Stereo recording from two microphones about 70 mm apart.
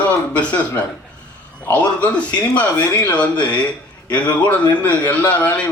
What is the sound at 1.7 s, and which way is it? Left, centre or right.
A man's voice, left.